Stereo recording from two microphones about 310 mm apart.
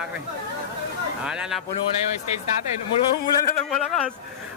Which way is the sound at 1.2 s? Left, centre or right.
Centre.